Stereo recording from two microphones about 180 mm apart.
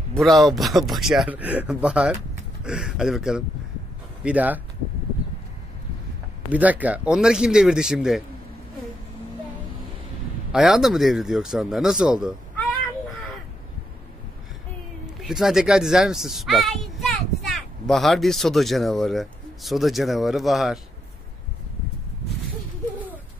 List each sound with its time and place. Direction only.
0.1 s a child's voice: centre (ahead or behind)
6.5 s a child's voice: 10° right (ahead or behind)
10.5 s a child's voice: centre (ahead or behind)
15.2 s a child's voice: centre (ahead or behind)